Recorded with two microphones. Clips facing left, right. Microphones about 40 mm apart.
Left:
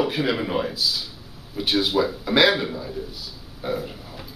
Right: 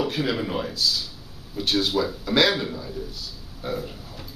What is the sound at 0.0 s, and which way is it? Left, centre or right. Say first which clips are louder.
Speech: left 2 dB; centre.